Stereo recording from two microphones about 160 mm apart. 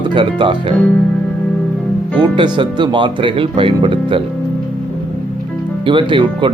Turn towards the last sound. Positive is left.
turn(degrees=-30)  # may be behind; listen again after turning